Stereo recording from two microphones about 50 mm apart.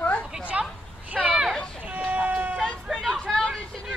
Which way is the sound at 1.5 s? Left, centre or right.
Centre.